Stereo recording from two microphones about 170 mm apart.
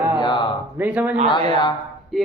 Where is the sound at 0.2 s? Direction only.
30° left (ahead or behind).